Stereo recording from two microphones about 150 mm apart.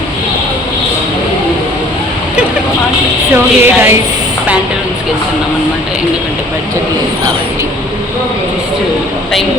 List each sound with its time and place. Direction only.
3.3 s music: 15° right (ahead or behind)